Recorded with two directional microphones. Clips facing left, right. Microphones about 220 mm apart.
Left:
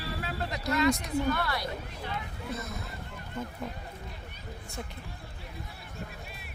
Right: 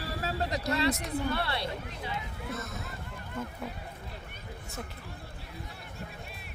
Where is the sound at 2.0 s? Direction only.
5° right (ahead or behind).